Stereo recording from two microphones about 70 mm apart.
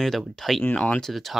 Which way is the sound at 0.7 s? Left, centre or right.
Centre.